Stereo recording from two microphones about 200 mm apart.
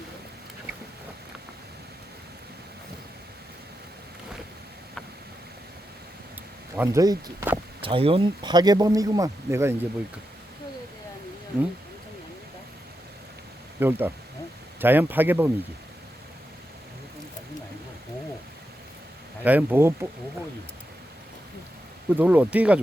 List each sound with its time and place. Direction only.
6.7 s speech: 15° right (ahead or behind)
13.7 s speech: 10° right (ahead or behind)
19.5 s speech: 10° right (ahead or behind)
22.1 s speech: 10° right (ahead or behind)